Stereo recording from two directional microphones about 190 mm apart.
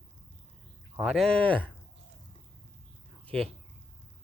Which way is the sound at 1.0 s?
Centre (ahead or behind).